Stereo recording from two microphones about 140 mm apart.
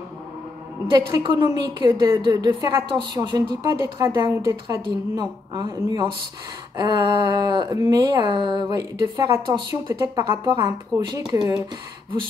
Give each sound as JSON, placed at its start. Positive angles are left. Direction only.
{"t": 0.9, "sound": "a woman's voice", "side_deg": -30}
{"t": 10.3, "sound": "a woman's voice", "side_deg": -20}